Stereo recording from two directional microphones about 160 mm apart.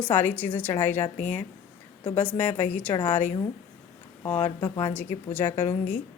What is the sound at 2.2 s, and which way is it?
Speech, 10° left (ahead or behind).